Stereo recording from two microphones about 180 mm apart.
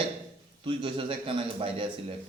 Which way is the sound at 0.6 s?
25° right (ahead or behind).